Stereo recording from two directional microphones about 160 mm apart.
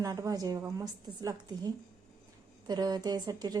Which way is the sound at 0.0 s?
20° right (ahead or behind).